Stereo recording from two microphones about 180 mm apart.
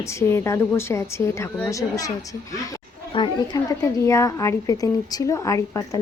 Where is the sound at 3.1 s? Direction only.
25° left (ahead or behind).